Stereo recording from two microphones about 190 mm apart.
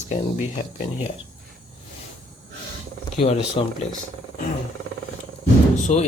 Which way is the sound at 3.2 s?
30° left (ahead or behind).